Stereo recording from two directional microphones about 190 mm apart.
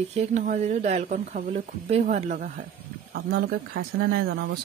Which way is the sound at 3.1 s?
55° right (ahead or behind).